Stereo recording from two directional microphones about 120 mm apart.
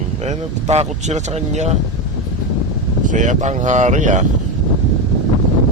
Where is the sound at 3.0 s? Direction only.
90° right.